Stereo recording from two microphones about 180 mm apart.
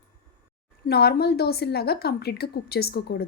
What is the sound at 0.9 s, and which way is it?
A woman's voice, 60° left (ahead or behind).